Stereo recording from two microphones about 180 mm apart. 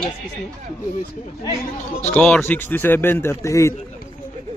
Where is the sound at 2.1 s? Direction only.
5° left (ahead or behind).